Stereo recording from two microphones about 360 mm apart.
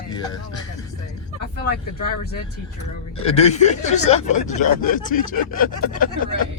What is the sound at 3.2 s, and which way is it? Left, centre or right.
Speech, centre.